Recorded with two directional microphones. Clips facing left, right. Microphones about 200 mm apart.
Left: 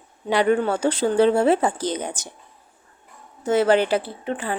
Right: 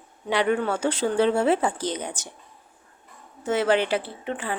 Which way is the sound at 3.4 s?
40° left (ahead or behind).